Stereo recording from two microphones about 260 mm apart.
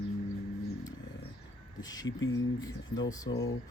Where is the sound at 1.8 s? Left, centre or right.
Centre.